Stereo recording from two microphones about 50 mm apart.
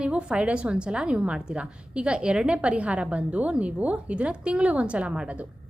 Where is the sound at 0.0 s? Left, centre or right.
Right.